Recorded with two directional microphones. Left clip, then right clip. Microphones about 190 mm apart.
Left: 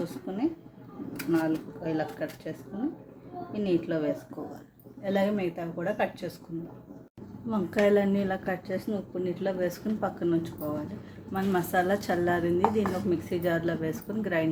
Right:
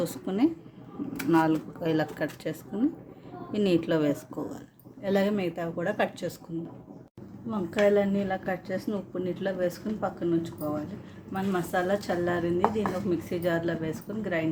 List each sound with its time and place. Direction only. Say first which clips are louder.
0.0 s a woman's voice: right 4 dB; 40° right (ahead or behind)
7.5 s speech: even; 5° left (ahead or behind)